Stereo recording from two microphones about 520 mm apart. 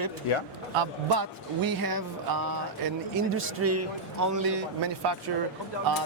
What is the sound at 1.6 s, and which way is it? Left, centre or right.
Speech, right.